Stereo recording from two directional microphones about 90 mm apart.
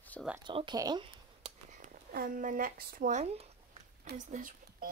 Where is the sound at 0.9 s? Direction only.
90° right.